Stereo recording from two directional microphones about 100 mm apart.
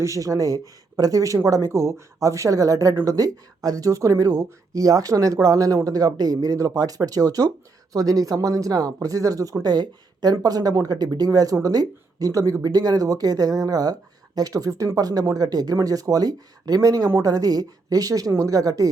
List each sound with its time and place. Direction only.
0.0 s speech: 35° right (ahead or behind)